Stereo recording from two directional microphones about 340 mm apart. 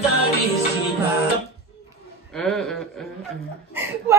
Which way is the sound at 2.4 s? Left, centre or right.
Centre.